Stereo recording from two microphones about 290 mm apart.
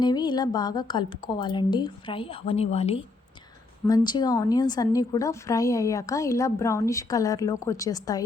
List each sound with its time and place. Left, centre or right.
0.0 s a woman's voice: centre